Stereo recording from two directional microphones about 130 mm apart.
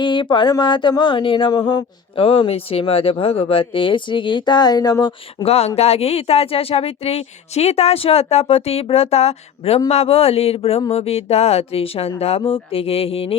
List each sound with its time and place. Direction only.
0.0 s speech: 35° left (ahead or behind)
5.5 s speech: 50° left (ahead or behind)